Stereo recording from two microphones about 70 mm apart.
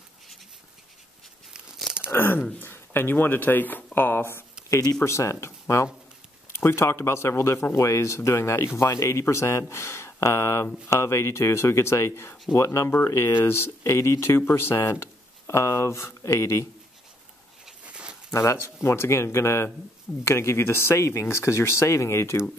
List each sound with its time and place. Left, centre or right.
2.0 s speech: left
4.6 s speech: left
17.8 s a sound: centre
18.3 s speech: left